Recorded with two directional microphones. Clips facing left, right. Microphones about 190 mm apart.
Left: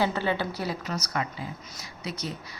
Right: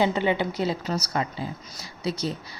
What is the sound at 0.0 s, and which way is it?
A woman's voice, 20° right (ahead or behind).